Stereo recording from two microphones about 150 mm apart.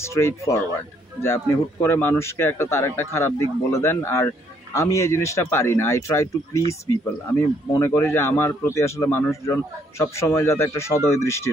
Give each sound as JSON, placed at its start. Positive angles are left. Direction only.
{"t": 0.0, "sound": "a man's voice", "side_deg": 15}